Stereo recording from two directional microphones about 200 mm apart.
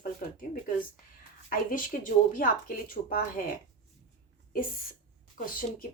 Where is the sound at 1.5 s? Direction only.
45° left (ahead or behind).